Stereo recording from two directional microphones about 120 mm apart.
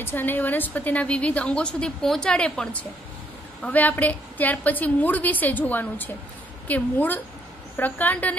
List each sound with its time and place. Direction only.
0.0 s a woman's voice: 15° left (ahead or behind)